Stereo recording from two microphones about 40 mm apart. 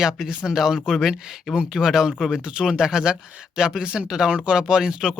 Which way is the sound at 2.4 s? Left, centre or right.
Right.